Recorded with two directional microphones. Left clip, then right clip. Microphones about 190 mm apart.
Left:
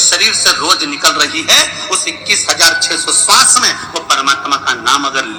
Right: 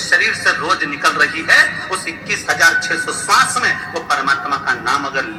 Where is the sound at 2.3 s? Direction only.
25° left (ahead or behind).